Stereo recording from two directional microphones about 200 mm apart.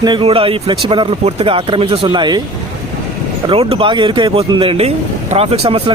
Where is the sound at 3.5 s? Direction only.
30° right (ahead or behind).